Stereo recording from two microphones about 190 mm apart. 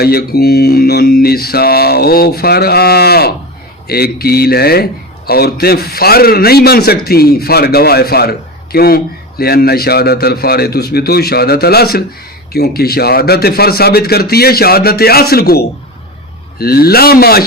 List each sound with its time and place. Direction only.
0.0 s a man's voice: 55° left (ahead or behind)